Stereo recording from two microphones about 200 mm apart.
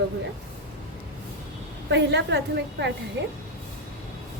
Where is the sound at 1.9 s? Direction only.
60° right (ahead or behind).